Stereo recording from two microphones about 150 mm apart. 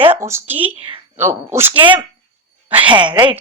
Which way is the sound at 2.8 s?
30° right (ahead or behind).